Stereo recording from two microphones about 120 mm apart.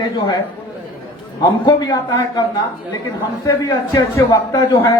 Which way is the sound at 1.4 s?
35° left (ahead or behind).